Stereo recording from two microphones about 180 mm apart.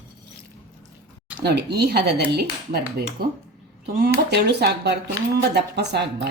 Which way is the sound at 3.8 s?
60° right (ahead or behind).